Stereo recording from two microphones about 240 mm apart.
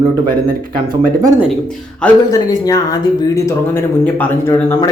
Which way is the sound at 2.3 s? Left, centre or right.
Centre.